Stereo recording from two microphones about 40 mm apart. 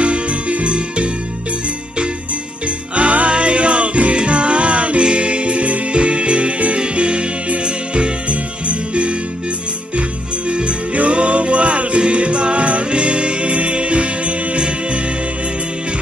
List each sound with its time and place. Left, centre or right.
0.0 s music: right
3.0 s music: right
10.5 s music: right